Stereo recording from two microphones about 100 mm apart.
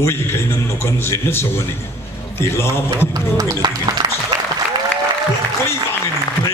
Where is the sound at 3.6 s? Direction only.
50° right (ahead or behind).